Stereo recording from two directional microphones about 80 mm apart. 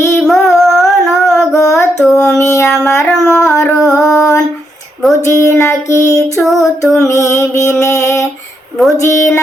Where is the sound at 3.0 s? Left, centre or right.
Centre.